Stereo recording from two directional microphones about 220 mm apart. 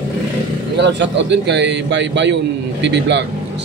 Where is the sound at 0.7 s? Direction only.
55° right (ahead or behind).